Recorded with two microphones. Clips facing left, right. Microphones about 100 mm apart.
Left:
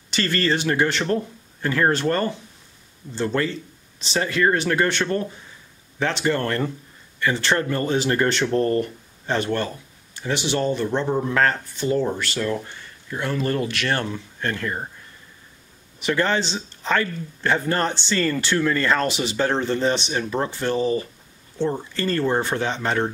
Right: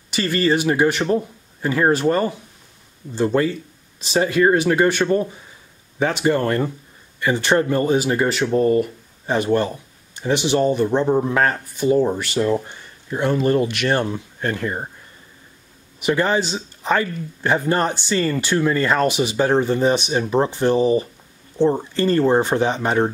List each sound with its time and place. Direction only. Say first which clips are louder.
0.1 s speech: right 3 dB; 10° right (ahead or behind)
16.0 s speech: right 3 dB; 15° right (ahead or behind)